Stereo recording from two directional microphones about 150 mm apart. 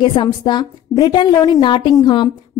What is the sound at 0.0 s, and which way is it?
A woman's voice, 30° left (ahead or behind).